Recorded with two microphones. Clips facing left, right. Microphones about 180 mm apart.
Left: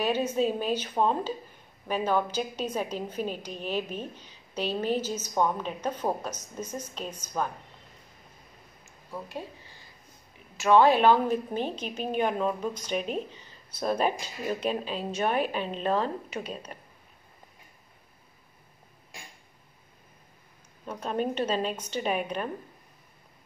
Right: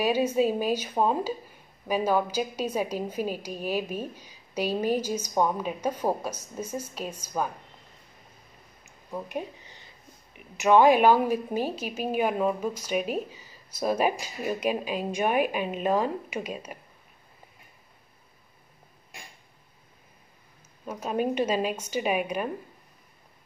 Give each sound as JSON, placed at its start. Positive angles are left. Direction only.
{"t": 0.0, "sound": "a woman's voice", "side_deg": -10}
{"t": 8.8, "sound": "a sound", "side_deg": -20}
{"t": 10.3, "sound": "a woman's voice", "side_deg": -15}
{"t": 20.8, "sound": "a woman's voice", "side_deg": -10}